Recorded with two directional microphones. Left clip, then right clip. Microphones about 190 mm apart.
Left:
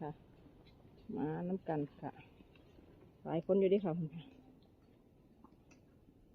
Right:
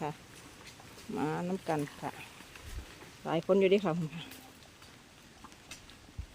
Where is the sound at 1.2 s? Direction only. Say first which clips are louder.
Right 6 dB; 10° right (ahead or behind).